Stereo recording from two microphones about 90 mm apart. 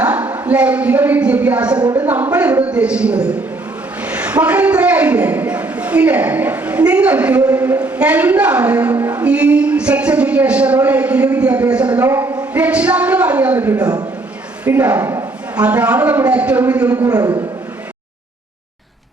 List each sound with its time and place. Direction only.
0.0 s a woman's voice: 15° right (ahead or behind)
12.0 s a woman's voice: 30° right (ahead or behind)
12.5 s speech: 15° right (ahead or behind)
13.7 s a man's voice: 50° right (ahead or behind)
14.7 s speech: 15° right (ahead or behind)
17.1 s a man's voice: 45° right (ahead or behind)